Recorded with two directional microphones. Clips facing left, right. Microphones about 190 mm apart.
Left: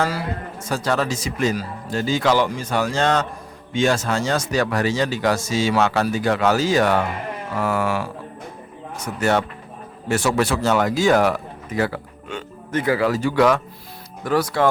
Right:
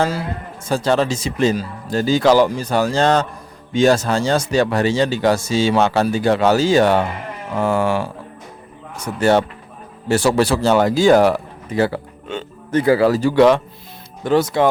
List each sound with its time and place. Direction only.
0.0 s speech: 25° right (ahead or behind)
9.1 s speech: 30° right (ahead or behind)